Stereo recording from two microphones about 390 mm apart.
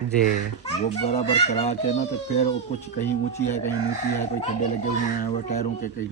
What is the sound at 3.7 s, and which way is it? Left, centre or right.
A child's voice, left.